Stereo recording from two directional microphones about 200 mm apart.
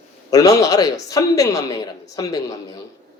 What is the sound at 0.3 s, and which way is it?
Speech, 15° left (ahead or behind).